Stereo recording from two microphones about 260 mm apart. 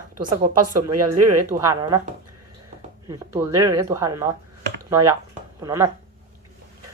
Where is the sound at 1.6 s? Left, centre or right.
Centre.